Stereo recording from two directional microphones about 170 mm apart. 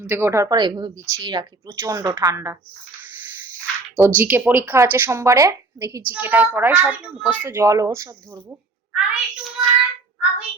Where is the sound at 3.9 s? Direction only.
10° right (ahead or behind).